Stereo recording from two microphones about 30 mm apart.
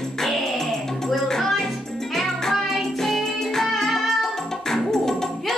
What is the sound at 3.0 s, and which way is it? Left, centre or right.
Music, centre.